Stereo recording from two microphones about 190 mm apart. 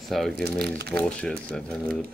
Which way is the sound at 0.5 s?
55° right (ahead or behind).